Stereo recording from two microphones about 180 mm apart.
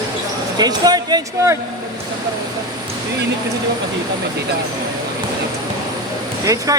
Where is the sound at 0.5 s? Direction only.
20° right (ahead or behind).